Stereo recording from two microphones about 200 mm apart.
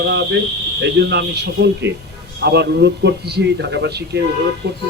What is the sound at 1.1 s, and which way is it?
Speech, 55° right (ahead or behind).